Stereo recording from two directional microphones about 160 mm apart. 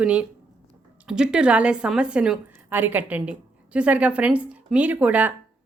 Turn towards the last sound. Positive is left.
turn(degrees=-10)  # may be behind; listen again after turning